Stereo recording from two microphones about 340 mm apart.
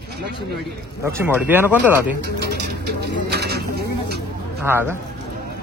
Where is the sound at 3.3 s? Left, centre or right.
Right.